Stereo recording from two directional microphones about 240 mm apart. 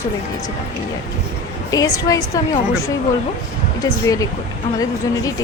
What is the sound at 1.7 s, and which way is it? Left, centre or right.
Speech, centre.